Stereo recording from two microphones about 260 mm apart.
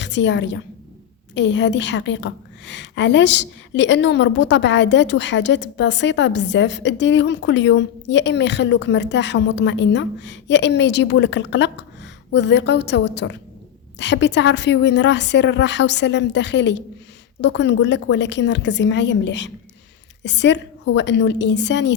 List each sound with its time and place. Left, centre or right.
0.0 s a woman's voice: left